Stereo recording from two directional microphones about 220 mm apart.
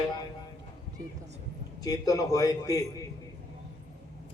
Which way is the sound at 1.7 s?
15° left (ahead or behind).